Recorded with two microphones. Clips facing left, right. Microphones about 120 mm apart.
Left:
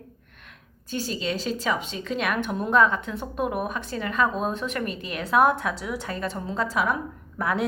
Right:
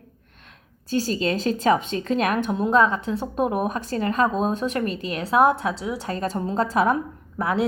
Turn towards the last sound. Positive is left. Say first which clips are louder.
# right 3 dB
turn(degrees=-30)  # may be behind; listen again after turning